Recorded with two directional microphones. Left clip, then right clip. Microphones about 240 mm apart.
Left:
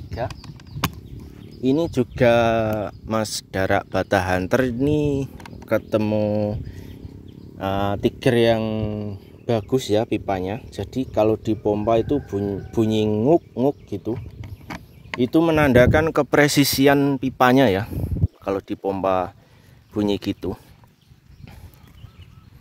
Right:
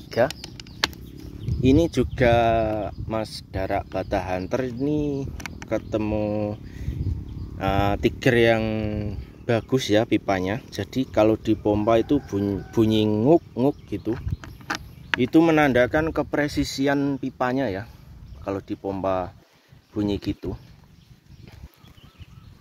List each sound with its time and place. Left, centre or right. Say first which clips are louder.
0.1 s speech: right 7 dB; right
1.6 s speech: right 1 dB; centre
2.1 s speech: left 2 dB; left
5.7 s speech: left 5 dB; left; by 14.1 s centre
15.1 s speech: even; centre
15.6 s speech: left 4 dB; left